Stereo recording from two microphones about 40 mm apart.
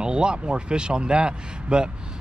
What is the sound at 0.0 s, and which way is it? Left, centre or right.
Speech, right.